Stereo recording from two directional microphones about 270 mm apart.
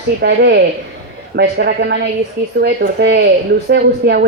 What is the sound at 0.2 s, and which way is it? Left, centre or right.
Speech, right.